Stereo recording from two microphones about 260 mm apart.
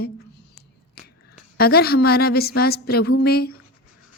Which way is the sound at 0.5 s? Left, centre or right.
Left.